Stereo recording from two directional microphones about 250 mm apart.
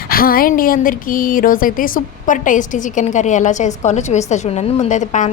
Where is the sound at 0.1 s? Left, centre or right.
Left.